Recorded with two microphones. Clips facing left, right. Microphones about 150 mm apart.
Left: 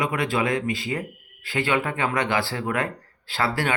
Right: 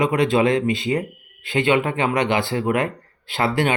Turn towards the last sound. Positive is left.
turn(degrees=-20)  # may be behind; listen again after turning